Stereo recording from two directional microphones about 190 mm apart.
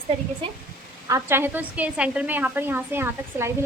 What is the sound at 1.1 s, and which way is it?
A woman's voice, 15° right (ahead or behind).